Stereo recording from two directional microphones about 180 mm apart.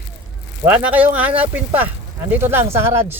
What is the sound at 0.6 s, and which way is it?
Speech, 10° right (ahead or behind).